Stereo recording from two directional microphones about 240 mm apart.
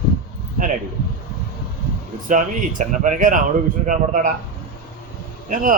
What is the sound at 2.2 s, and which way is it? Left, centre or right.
Speech, right.